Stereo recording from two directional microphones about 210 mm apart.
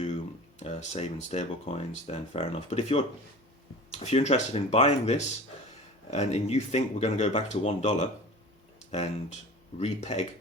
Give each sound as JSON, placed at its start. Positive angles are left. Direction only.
{"t": 0.6, "sound": "speech", "side_deg": 30}